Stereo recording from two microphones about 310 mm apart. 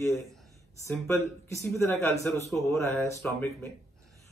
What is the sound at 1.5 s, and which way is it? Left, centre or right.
A man's voice, centre.